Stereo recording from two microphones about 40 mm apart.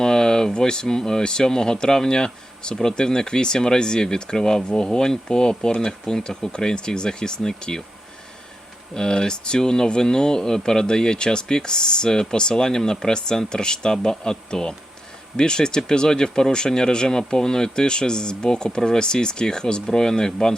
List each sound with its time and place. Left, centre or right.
0.0 s speech: centre
9.0 s speech: centre